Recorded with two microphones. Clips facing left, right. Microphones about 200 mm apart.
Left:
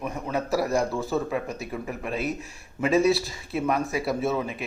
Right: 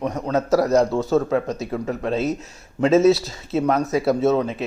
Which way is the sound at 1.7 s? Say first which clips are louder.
Right 8 dB; 85° right.